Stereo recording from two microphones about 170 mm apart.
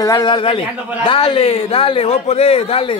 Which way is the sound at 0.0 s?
25° left (ahead or behind).